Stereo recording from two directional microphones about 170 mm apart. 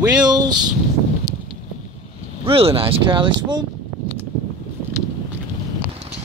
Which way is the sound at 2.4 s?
35° right (ahead or behind).